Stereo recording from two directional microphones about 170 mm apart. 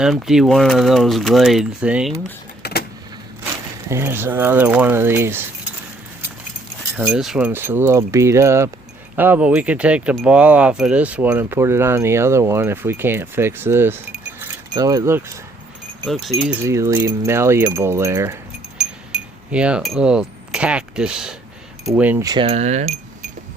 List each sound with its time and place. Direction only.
0.0 s speech: 5° right (ahead or behind)
2.6 s vehicle: 70° left (ahead or behind)
3.8 s speech: 15° right (ahead or behind)
6.9 s speech: 10° right (ahead or behind)
16.0 s speech: centre (ahead or behind)
16.5 s speech: 15° right (ahead or behind)
18.8 s wind chime: 5° right (ahead or behind)
21.8 s speech: 5° right (ahead or behind)
22.2 s speech: 20° right (ahead or behind)
22.4 s speech: 40° right (ahead or behind)